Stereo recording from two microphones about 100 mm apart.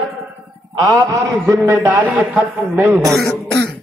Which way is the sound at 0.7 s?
40° right (ahead or behind).